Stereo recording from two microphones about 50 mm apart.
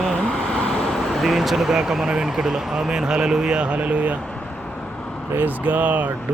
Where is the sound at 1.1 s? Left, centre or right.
Centre; by 4.2 s right.